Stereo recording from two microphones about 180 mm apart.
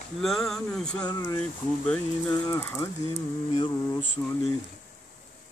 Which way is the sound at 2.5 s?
15° left (ahead or behind).